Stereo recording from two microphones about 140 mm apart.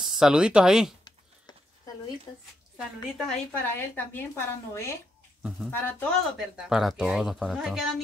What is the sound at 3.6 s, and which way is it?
A woman's voice, 15° left (ahead or behind).